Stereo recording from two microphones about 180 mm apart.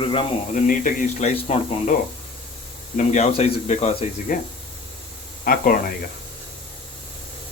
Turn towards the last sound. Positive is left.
turn(degrees=55)  # may be behind; listen again after turning